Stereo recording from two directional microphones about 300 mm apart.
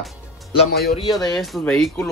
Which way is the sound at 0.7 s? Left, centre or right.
Left.